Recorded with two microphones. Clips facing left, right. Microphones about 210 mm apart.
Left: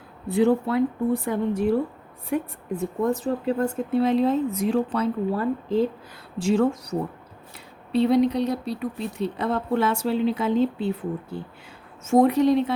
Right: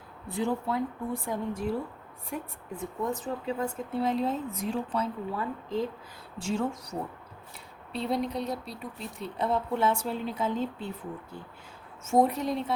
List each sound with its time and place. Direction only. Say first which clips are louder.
0.3 s speech: left 9 dB; 70° left (ahead or behind)